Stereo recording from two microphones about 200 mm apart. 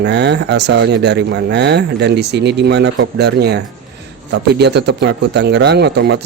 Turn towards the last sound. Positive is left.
turn(degrees=-55)  # may be behind; listen again after turning